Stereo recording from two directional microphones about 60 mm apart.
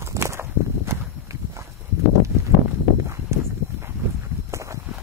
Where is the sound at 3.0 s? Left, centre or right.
Right.